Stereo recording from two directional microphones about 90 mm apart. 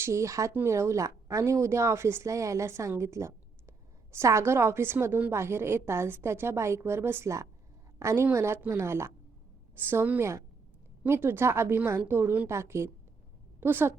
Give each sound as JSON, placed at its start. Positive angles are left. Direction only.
{"t": 0.0, "sound": "a woman's voice", "side_deg": -35}